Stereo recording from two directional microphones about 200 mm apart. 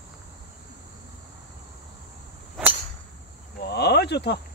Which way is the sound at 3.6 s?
55° left (ahead or behind).